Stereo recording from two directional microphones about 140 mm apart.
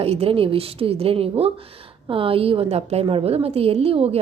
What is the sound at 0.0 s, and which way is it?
A woman's voice, 45° right (ahead or behind).